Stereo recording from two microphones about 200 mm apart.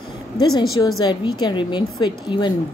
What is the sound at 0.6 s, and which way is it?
Speech, 90° left.